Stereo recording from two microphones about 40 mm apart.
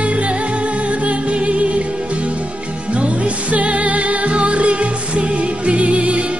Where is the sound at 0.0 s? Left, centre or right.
Right.